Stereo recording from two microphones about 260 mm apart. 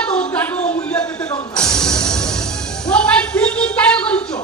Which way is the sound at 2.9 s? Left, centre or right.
Centre.